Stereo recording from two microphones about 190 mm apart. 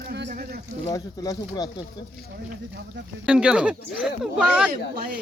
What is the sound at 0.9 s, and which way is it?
Speech, 15° left (ahead or behind).